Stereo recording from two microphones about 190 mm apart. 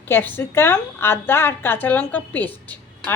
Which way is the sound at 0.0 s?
10° left (ahead or behind).